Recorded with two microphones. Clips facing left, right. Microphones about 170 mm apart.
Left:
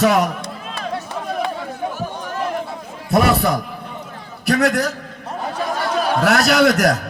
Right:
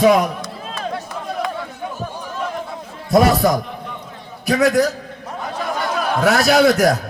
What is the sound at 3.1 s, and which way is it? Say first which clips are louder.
A man's voice: right 2 dB; 60° left (ahead or behind).